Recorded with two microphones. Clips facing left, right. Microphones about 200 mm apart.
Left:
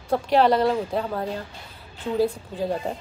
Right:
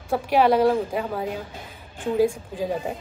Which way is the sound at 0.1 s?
10° right (ahead or behind).